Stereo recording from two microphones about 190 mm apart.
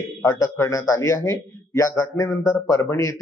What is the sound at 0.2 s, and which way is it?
A man's voice, 15° left (ahead or behind).